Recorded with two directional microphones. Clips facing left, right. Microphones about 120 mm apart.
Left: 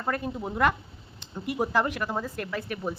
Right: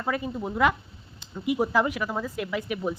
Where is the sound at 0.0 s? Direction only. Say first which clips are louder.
Right 1 dB; centre (ahead or behind).